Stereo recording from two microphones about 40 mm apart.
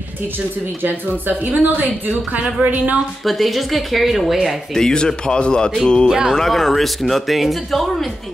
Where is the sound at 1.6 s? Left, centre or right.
Right.